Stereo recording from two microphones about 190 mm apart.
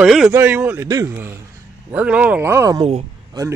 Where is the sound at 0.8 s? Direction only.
20° right (ahead or behind).